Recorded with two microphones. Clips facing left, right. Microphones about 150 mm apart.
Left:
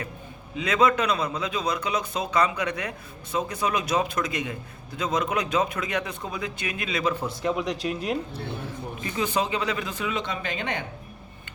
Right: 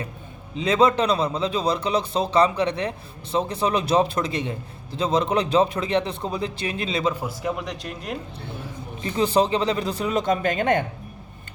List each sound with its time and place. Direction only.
0.5 s a man's voice: 30° right (ahead or behind)
7.2 s speech: 5° right (ahead or behind)
9.0 s a man's voice: 30° right (ahead or behind); by 10.8 s 50° right (ahead or behind)